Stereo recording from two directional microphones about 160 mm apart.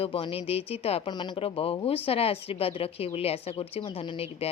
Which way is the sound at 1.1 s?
30° left (ahead or behind).